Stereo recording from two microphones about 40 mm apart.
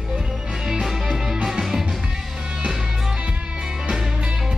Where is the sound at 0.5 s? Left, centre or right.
Centre.